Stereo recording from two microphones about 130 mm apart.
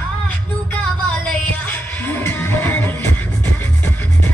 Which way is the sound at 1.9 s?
15° left (ahead or behind).